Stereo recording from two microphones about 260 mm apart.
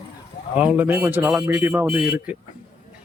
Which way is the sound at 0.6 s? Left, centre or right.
Centre.